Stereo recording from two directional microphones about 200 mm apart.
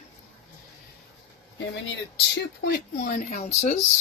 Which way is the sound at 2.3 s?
60° left (ahead or behind).